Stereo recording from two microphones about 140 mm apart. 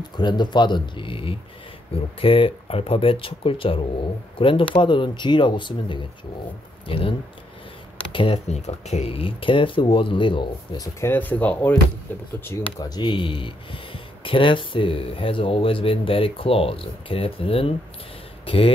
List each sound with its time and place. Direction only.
0.2 s speech: 30° left (ahead or behind)
8.5 s speech: 55° left (ahead or behind); by 10.9 s 35° left (ahead or behind)
11.0 s speech: 15° left (ahead or behind)
12.4 s speech: 25° left (ahead or behind); by 18.7 s 40° left (ahead or behind)